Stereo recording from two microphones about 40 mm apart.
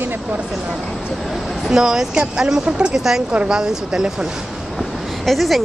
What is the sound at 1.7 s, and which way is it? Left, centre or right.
Speech, centre.